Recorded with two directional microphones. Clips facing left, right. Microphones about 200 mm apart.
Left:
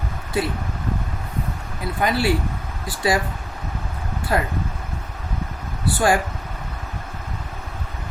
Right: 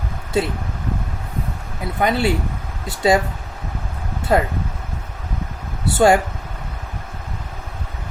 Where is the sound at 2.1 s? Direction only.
20° right (ahead or behind).